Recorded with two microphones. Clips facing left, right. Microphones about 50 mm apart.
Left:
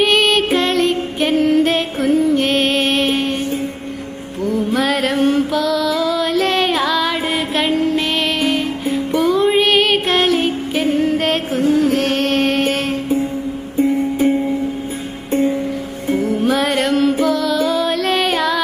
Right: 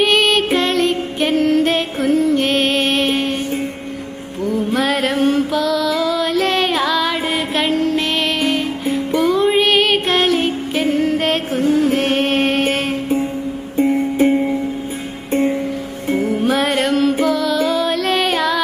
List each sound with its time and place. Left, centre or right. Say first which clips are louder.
0.0 s music: even; centre
4.4 s music: even; centre
13.7 s music: right 1 dB; right
15.3 s music: even; right
16.3 s music: even; centre